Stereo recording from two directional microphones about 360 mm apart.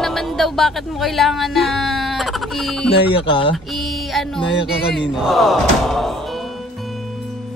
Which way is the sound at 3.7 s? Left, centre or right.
Centre.